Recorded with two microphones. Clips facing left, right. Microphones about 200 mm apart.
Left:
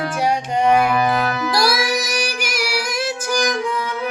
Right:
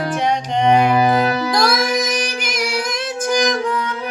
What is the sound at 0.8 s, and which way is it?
Music, 25° right (ahead or behind).